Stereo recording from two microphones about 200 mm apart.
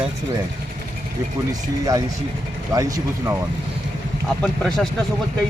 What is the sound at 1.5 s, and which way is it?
A man's voice, 20° right (ahead or behind).